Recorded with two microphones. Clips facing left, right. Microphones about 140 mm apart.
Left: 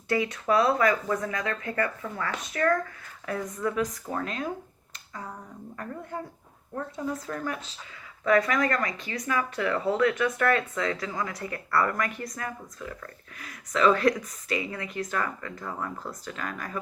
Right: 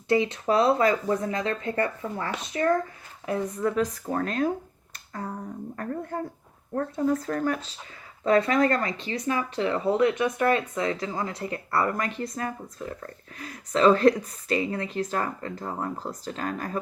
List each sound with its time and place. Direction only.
0.1 s speech: 25° right (ahead or behind)
3.6 s speech: 35° right (ahead or behind)
5.7 s speech: 40° right (ahead or behind)
8.2 s speech: 30° right (ahead or behind)